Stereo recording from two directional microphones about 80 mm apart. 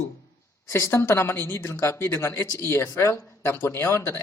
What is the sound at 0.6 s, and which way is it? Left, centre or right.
Speech, left.